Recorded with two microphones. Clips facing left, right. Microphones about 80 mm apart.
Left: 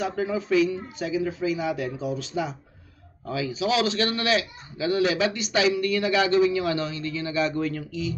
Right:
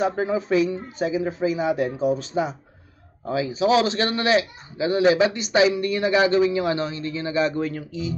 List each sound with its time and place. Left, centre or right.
0.0 s a man's voice: right